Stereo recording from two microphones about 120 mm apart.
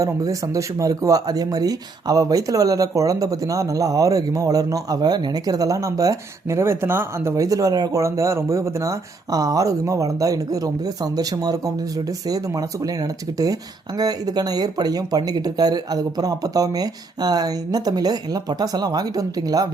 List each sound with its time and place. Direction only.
0.0 s speech: 30° right (ahead or behind)